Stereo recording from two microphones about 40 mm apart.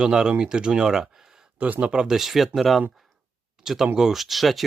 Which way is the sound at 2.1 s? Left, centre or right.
Centre.